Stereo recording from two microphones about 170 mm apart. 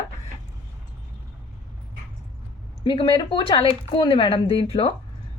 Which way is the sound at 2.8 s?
30° left (ahead or behind).